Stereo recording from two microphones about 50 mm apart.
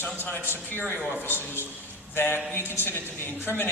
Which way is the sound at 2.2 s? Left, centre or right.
Left.